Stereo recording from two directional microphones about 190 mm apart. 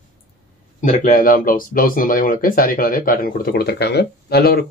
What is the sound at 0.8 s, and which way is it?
Speech, 40° left (ahead or behind).